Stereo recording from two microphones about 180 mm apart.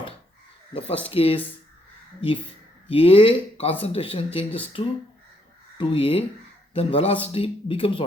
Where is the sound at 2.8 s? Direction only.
30° left (ahead or behind).